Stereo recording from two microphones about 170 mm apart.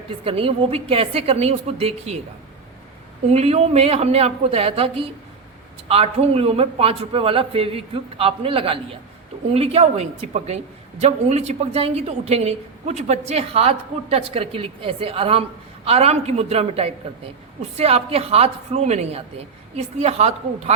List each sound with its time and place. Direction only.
0.3 s a woman's voice: 35° right (ahead or behind)
3.2 s a woman's voice: 40° right (ahead or behind)